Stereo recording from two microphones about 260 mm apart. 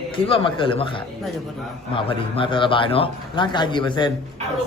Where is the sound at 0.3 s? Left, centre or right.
Centre.